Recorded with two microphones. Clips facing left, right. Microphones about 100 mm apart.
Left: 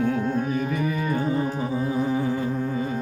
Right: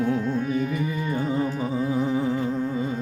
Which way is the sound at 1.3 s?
30° left (ahead or behind).